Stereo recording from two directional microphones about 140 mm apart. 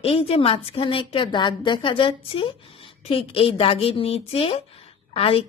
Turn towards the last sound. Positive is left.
turn(degrees=45)  # may be behind; listen again after turning